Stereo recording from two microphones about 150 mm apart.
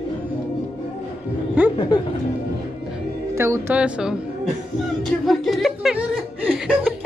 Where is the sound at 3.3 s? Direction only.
20° right (ahead or behind); by 6.0 s centre (ahead or behind).